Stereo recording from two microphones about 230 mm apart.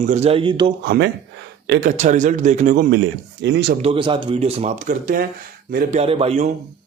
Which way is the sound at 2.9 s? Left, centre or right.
Right.